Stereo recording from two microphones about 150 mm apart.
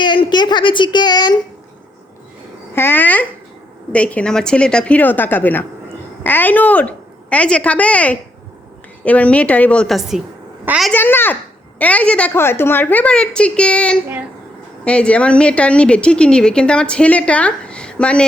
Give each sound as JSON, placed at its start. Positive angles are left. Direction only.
{"t": 0.0, "sound": "a child's voice", "side_deg": 30}
{"t": 2.7, "sound": "a woman's voice", "side_deg": 15}
{"t": 10.9, "sound": "a woman's voice", "side_deg": 15}